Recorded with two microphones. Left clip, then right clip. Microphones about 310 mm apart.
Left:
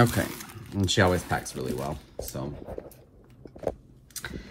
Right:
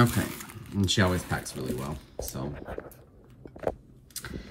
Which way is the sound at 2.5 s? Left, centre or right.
Left.